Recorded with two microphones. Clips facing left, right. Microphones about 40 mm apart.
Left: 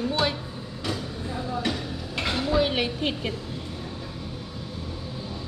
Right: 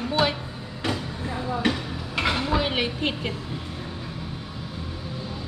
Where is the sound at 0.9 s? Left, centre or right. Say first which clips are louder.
Right 3 dB; right; by 3.3 s centre.